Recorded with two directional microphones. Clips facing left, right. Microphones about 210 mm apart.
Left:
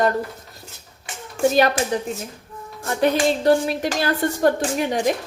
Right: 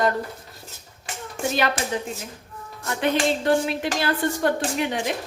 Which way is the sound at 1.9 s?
35° left (ahead or behind).